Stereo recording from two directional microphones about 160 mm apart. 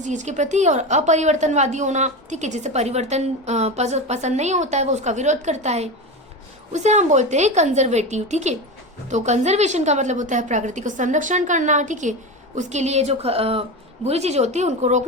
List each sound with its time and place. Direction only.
0.0 s a woman's voice: 50° right (ahead or behind)